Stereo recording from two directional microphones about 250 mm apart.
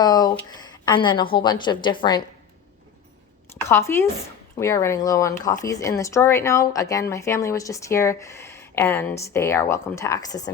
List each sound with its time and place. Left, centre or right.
0.0 s speech: centre
3.7 s speech: centre